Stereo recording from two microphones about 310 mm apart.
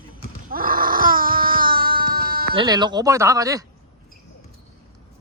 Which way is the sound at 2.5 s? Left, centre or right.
Centre.